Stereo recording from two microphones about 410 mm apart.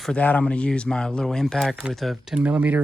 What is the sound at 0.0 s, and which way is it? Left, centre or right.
Speech, centre.